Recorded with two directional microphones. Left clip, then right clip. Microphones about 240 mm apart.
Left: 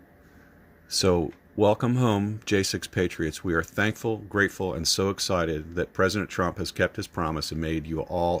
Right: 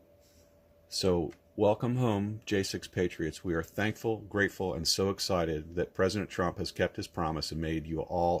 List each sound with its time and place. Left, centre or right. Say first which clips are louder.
0.9 s speech: left 6 dB; left